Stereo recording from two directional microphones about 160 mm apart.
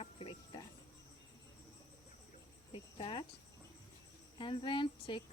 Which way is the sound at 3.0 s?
35° left (ahead or behind).